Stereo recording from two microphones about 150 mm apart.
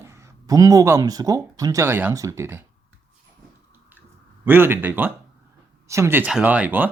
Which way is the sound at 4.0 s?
15° right (ahead or behind).